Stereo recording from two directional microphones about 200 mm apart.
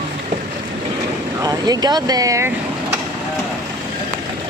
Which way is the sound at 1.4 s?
20° right (ahead or behind).